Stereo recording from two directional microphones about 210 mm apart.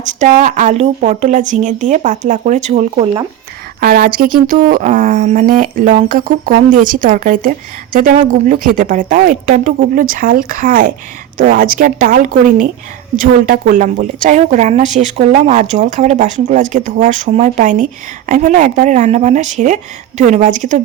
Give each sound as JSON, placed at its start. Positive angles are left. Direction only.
{"t": 0.2, "sound": "a woman's voice", "side_deg": -35}
{"t": 3.8, "sound": "a woman's voice", "side_deg": -45}